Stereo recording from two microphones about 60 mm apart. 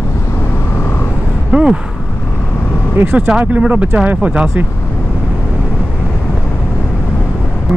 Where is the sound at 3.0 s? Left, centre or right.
Right.